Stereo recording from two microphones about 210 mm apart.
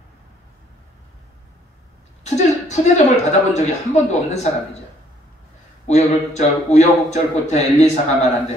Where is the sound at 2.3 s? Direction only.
35° left (ahead or behind).